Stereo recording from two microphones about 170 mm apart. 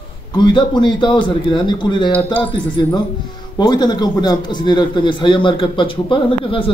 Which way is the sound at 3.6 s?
25° left (ahead or behind).